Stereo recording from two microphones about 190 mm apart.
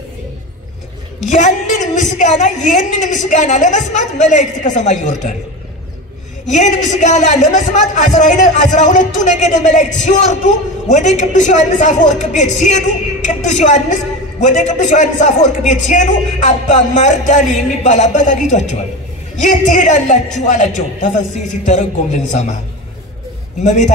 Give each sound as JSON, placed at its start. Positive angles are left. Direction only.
{"t": 1.2, "sound": "a sound", "side_deg": 40}
{"t": 2.1, "sound": "a man's voice", "side_deg": 40}
{"t": 6.5, "sound": "a man's voice", "side_deg": 40}
{"t": 23.6, "sound": "a man's voice", "side_deg": 40}